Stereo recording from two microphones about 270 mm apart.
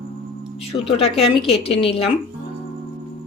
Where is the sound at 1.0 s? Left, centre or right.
Left.